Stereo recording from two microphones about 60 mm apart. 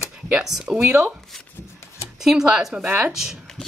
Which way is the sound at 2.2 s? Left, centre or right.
Centre.